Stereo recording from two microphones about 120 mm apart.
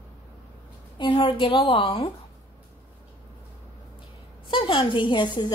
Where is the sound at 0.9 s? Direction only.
45° left (ahead or behind).